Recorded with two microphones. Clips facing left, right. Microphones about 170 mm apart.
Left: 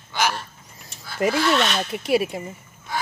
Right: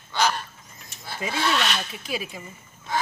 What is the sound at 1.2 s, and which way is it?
Speech, 65° left (ahead or behind).